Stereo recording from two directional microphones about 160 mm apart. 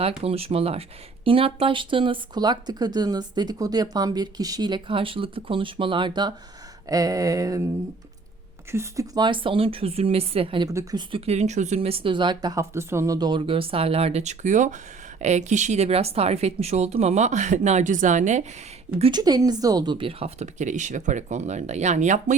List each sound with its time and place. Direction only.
0.0 s speech: 40° right (ahead or behind)
6.8 s a sound: 20° right (ahead or behind)
8.7 s speech: 20° right (ahead or behind); by 10.7 s 35° right (ahead or behind)
10.7 s a sound: 20° right (ahead or behind)
11.1 s speech: 40° right (ahead or behind)
19.1 s speech: 25° right (ahead or behind); by 22.4 s 50° right (ahead or behind)